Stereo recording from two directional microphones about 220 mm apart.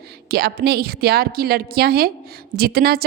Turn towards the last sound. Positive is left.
turn(degrees=-45)  # may be behind; listen again after turning